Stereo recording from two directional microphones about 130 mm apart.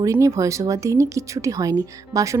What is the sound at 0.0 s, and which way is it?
Speech, 25° right (ahead or behind).